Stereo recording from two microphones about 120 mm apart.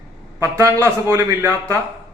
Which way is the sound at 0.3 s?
25° right (ahead or behind).